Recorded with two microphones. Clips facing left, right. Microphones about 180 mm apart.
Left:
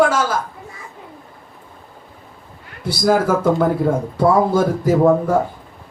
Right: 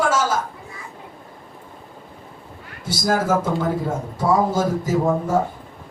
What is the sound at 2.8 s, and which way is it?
Speech, 60° left (ahead or behind).